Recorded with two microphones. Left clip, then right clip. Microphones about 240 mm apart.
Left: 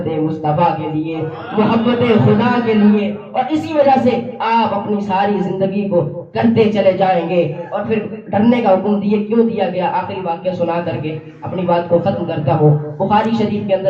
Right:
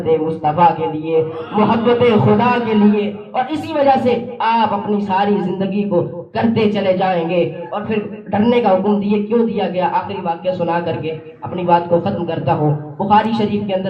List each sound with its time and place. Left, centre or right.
0.4 s a woman's voice: right